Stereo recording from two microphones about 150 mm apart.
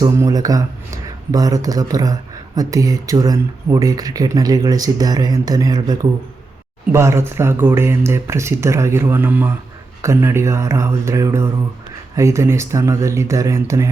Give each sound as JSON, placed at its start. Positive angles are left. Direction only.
{"t": 0.2, "sound": "speech", "side_deg": -25}